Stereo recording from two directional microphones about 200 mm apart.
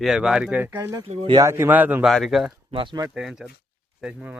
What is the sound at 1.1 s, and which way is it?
Speech, 30° right (ahead or behind).